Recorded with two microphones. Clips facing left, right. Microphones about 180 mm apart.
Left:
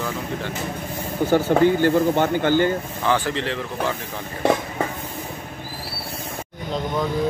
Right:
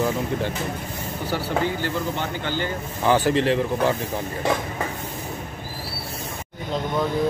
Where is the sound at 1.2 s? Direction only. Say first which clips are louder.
Left 8 dB; 50° left (ahead or behind).